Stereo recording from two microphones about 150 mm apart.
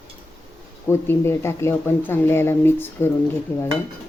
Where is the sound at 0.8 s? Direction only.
15° left (ahead or behind).